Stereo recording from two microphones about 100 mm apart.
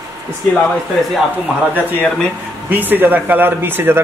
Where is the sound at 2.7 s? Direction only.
20° right (ahead or behind).